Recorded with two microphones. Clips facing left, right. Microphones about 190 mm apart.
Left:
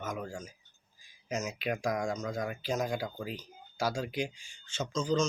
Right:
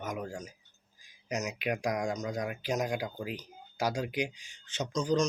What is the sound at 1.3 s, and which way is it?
Speech, 15° right (ahead or behind).